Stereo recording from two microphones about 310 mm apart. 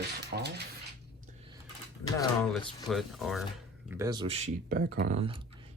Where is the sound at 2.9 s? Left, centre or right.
Centre.